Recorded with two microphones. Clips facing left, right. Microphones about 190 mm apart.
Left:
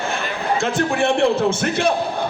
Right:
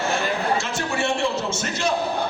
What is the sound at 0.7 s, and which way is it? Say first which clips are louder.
A man's voice: left 6 dB; 55° left (ahead or behind).